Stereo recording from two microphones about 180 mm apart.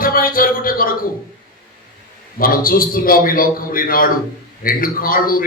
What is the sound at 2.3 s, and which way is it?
A man's voice, 55° left (ahead or behind).